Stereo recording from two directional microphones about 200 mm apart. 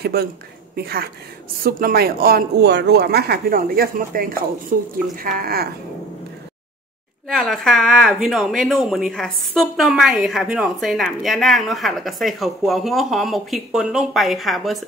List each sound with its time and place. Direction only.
0.0 s a sound: 50° right (ahead or behind)
0.7 s speech: 50° right (ahead or behind)
7.2 s a woman's voice: centre (ahead or behind)